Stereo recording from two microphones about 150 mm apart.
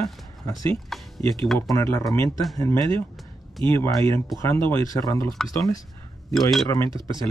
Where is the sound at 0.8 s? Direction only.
Centre (ahead or behind).